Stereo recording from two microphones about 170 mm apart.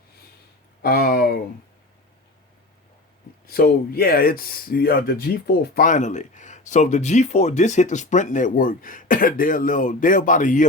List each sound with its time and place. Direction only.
0.8 s speech: 60° left (ahead or behind)
3.4 s speech: 65° left (ahead or behind)